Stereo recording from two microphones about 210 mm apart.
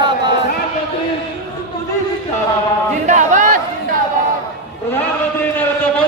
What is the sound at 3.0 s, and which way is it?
Chatter, 35° right (ahead or behind).